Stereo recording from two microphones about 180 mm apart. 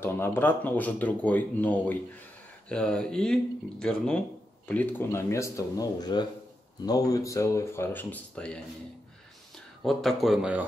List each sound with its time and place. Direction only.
0.0 s speech: 10° left (ahead or behind)
9.8 s speech: centre (ahead or behind)